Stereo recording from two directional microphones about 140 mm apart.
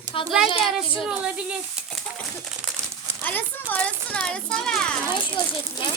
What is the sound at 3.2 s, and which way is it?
Speech, 10° left (ahead or behind).